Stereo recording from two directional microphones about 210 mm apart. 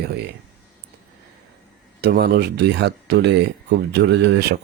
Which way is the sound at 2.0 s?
50° right (ahead or behind).